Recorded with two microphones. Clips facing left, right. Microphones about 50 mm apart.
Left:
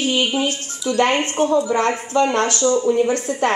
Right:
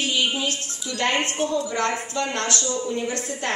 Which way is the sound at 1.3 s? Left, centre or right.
Left.